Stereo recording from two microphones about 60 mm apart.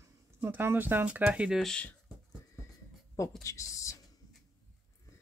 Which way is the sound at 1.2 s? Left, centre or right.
Centre.